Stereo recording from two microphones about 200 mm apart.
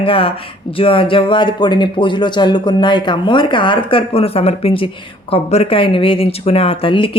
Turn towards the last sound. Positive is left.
turn(degrees=25)  # may be behind; listen again after turning